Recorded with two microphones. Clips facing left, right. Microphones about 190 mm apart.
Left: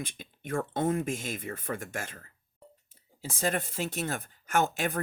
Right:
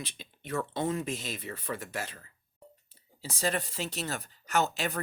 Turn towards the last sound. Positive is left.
turn(degrees=50)  # may be behind; listen again after turning